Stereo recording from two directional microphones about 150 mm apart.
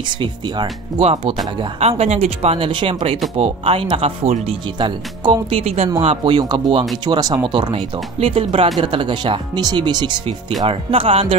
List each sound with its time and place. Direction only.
0.1 s speech: 35° right (ahead or behind)
6.2 s speech: 30° right (ahead or behind)